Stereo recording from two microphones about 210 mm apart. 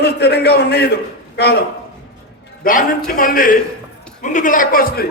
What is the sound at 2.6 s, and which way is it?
A man's voice, 40° left (ahead or behind).